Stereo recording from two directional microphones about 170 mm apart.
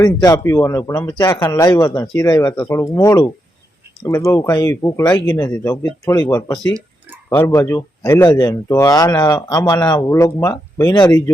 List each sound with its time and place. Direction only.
0.0 s speech: 20° left (ahead or behind)